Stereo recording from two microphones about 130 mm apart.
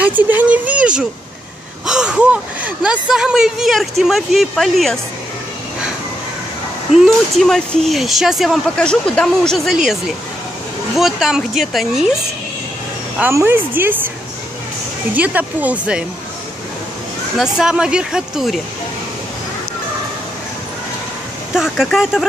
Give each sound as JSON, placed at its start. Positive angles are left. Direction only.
{"t": 0.0, "sound": "speech", "side_deg": -15}
{"t": 6.9, "sound": "speech", "side_deg": 0}
{"t": 13.2, "sound": "speech", "side_deg": -20}
{"t": 15.1, "sound": "speech", "side_deg": -10}
{"t": 17.4, "sound": "speech", "side_deg": -5}
{"t": 21.5, "sound": "speech", "side_deg": 0}